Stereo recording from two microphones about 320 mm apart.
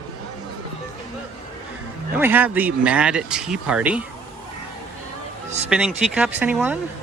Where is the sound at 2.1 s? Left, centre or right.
Centre.